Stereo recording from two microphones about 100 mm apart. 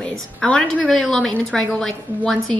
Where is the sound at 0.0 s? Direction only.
10° left (ahead or behind).